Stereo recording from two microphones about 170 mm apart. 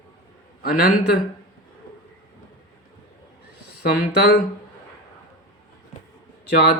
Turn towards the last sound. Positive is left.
turn(degrees=70)  # may be behind; listen again after turning